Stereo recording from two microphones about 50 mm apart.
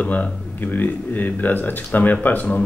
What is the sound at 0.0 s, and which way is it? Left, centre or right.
Speech, left.